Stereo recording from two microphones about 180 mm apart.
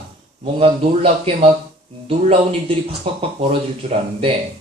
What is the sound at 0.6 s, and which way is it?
Speech, 35° right (ahead or behind).